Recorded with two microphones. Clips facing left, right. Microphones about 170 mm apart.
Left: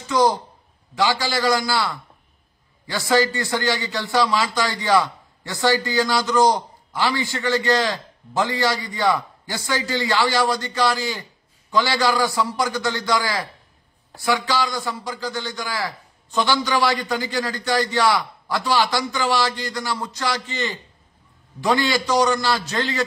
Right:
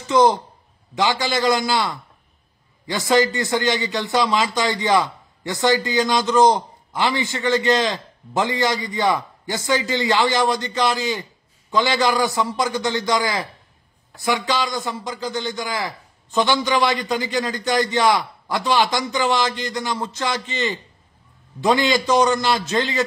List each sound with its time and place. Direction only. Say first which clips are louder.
0.0 s a man's voice: right 3 dB; 20° right (ahead or behind)